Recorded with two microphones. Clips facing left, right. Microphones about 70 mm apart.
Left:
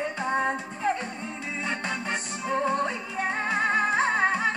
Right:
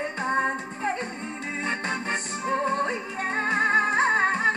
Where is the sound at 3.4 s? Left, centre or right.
Right.